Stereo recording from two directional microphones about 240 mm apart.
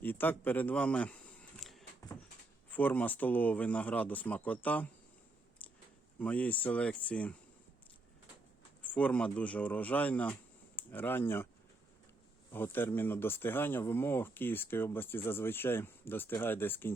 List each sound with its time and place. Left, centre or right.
0.0 s speech: centre
6.1 s speech: centre
8.8 s speech: centre
12.5 s speech: centre